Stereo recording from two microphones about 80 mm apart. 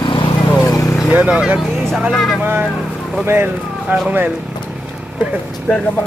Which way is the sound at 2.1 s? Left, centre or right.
Centre.